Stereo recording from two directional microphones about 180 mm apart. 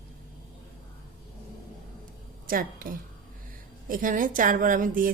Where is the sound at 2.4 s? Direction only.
50° right (ahead or behind).